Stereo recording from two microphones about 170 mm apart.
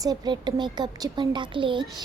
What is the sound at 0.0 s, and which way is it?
A woman's voice, 25° right (ahead or behind).